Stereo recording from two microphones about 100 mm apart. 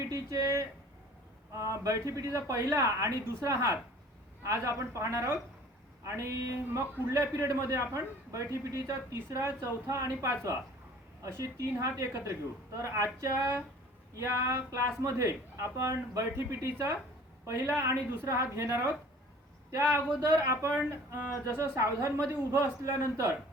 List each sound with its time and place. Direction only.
0.0 s a sound: 35° right (ahead or behind)
1.5 s a man's voice: 30° right (ahead or behind)
20.4 s a man's voice: 30° right (ahead or behind)